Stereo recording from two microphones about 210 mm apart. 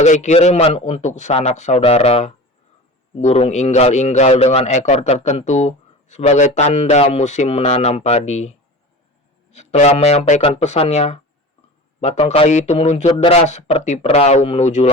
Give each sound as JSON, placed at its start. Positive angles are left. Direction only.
{"t": 0.0, "sound": "a man's voice", "side_deg": 35}